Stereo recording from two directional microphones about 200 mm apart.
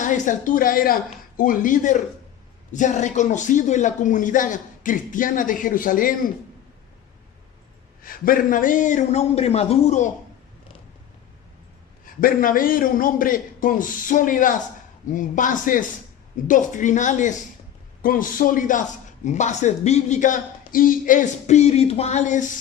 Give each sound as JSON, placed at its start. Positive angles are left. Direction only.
{"t": 0.0, "sound": "a woman's voice", "side_deg": 40}
{"t": 8.0, "sound": "speech", "side_deg": 45}
{"t": 12.2, "sound": "a man's voice", "side_deg": 45}